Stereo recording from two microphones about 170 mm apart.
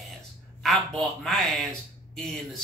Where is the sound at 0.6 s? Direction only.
Centre (ahead or behind).